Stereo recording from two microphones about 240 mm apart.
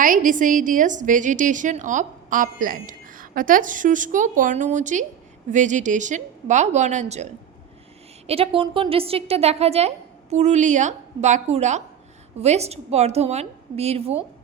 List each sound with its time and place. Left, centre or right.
0.0 s a woman's voice: right